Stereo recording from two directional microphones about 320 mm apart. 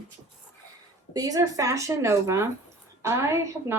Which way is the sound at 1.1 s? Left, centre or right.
Centre.